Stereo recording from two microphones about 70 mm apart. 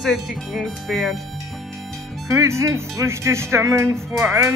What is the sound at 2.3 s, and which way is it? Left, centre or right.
Speech, right.